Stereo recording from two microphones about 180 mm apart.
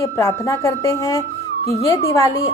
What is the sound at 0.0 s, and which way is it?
A woman's voice, 15° left (ahead or behind).